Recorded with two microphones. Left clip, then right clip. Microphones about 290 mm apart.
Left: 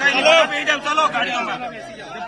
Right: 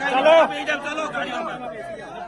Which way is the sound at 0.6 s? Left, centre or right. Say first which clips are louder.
Left 7 dB; centre.